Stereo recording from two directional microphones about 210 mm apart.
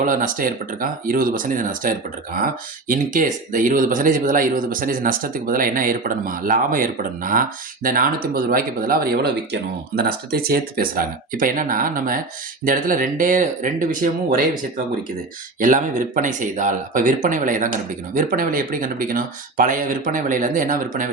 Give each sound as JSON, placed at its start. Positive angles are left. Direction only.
{"t": 0.0, "sound": "speech", "side_deg": -40}
{"t": 15.6, "sound": "speech", "side_deg": -40}